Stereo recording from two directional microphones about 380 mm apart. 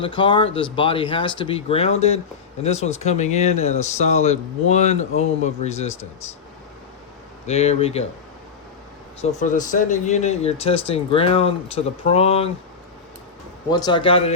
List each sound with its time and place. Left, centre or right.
0.0 s speech: centre
7.4 s speech: centre
9.4 s speech: centre
13.7 s speech: centre